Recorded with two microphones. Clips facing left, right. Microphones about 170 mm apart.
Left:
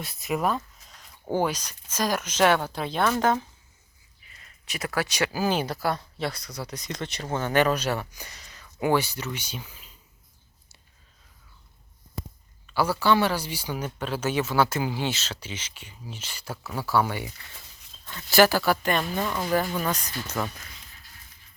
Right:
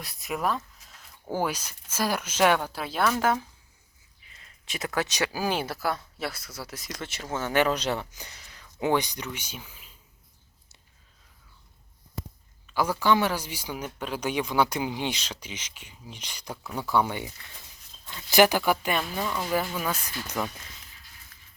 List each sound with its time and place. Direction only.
0.0 s speech: centre (ahead or behind)
4.7 s speech: 20° right (ahead or behind)
5.6 s speech: 5° right (ahead or behind)
12.6 s a sound: 10° right (ahead or behind)
13.0 s speech: 10° right (ahead or behind)
16.6 s speech: 5° left (ahead or behind)
16.9 s speech: 20° right (ahead or behind)